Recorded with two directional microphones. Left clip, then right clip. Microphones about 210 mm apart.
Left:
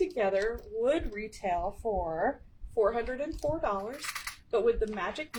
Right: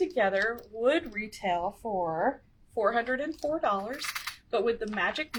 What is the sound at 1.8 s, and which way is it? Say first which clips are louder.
Speech: left 1 dB; 40° right (ahead or behind).